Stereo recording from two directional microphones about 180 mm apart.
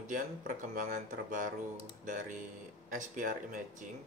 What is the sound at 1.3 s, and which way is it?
Speech, 45° right (ahead or behind).